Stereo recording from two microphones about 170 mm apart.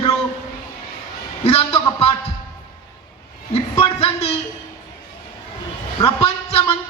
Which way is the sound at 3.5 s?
35° left (ahead or behind).